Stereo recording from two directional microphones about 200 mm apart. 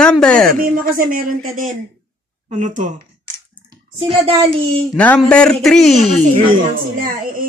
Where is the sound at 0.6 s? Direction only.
45° right (ahead or behind).